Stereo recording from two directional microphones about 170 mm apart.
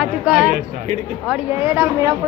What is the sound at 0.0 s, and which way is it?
A woman's voice, 5° right (ahead or behind).